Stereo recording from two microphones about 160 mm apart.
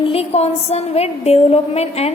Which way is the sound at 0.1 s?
40° left (ahead or behind).